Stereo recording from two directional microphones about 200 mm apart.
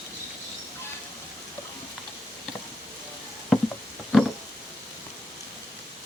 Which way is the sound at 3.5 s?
Centre (ahead or behind).